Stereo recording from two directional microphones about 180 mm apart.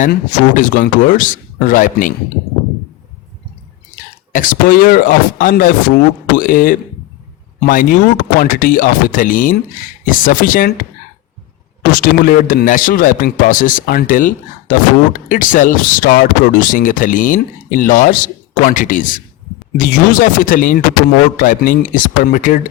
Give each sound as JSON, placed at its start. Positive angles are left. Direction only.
{"t": 0.0, "sound": "a man's voice", "side_deg": 45}
{"t": 4.3, "sound": "a man's voice", "side_deg": 50}
{"t": 11.9, "sound": "a man's voice", "side_deg": 50}